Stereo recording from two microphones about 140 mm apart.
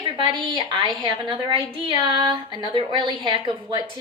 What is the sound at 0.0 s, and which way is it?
A woman's voice, 35° right (ahead or behind).